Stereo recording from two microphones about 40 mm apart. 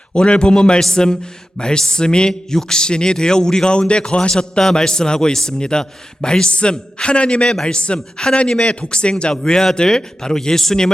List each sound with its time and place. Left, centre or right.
0.1 s speech: left